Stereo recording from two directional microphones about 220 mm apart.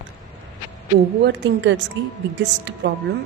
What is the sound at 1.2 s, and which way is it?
Speech, 50° right (ahead or behind).